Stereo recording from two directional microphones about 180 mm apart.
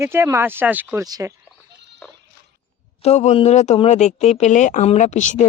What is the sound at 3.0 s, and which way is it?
Speech, 40° left (ahead or behind).